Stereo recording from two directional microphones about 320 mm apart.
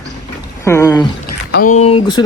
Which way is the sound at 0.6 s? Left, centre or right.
Centre.